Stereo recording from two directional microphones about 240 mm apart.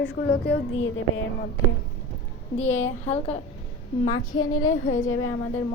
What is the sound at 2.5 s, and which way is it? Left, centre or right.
Speech, left.